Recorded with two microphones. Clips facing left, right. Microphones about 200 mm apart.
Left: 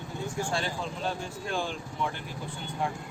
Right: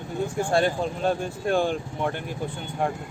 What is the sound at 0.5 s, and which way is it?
Speech, 55° right (ahead or behind).